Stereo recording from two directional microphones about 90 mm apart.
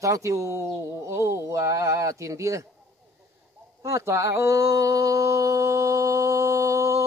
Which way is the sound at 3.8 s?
35° right (ahead or behind).